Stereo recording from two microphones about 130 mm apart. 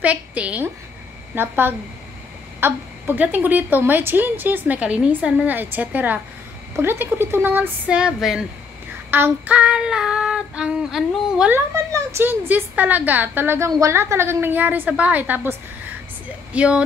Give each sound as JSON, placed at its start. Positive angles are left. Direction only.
{"t": 0.0, "sound": "a woman's voice", "side_deg": -10}
{"t": 11.5, "sound": "a woman's voice", "side_deg": -20}
{"t": 16.5, "sound": "a woman's voice", "side_deg": -10}